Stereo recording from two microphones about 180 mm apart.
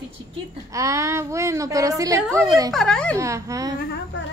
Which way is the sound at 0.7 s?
15° right (ahead or behind).